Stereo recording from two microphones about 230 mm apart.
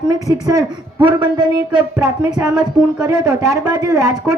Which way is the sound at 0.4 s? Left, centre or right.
Centre.